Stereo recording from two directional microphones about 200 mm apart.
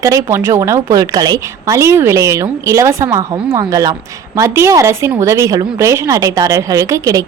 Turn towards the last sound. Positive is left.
turn(degrees=-15)  # may be behind; listen again after turning